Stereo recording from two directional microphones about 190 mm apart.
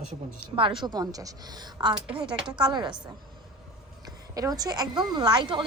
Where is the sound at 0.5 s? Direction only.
25° right (ahead or behind).